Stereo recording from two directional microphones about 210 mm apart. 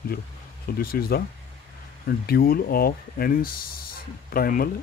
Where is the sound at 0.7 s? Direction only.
45° left (ahead or behind).